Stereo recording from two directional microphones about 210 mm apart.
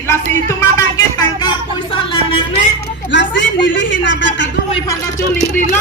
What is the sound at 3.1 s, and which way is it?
Speech, 60° left (ahead or behind).